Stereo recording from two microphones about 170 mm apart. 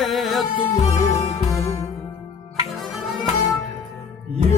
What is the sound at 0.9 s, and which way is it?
Music, 20° left (ahead or behind).